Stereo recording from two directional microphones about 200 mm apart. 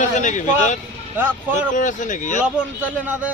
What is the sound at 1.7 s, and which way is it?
Speech, 40° left (ahead or behind).